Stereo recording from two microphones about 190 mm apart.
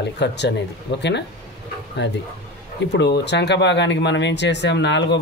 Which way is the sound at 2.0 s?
65° left (ahead or behind).